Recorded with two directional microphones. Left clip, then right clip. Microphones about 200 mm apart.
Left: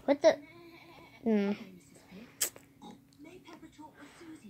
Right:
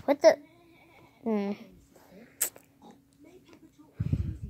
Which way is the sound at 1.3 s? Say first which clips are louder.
Even; centre (ahead or behind).